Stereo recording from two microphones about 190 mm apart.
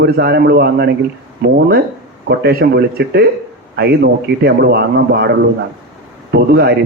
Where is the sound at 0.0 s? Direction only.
55° right (ahead or behind).